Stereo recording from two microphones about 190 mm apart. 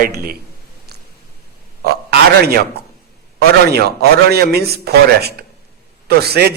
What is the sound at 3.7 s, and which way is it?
Speech, 55° right (ahead or behind).